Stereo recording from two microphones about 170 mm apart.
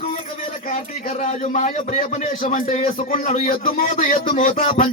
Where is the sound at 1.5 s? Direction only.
45° left (ahead or behind).